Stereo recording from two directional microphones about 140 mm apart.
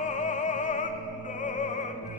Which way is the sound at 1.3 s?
65° left (ahead or behind).